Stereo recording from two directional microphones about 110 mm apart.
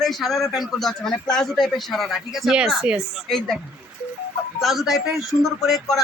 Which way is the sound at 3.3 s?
5° left (ahead or behind).